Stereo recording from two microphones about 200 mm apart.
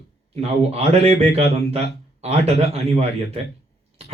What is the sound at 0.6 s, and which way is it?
A man's voice, 30° right (ahead or behind).